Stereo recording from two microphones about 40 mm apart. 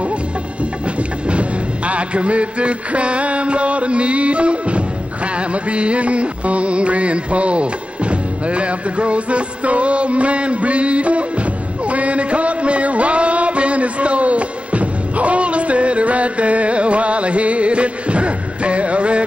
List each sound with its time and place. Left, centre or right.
1.2 s music: right